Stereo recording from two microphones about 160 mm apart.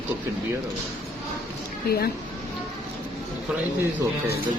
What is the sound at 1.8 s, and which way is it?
Speech, 75° left (ahead or behind).